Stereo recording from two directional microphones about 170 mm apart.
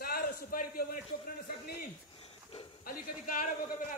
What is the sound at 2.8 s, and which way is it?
Speech, 55° left (ahead or behind).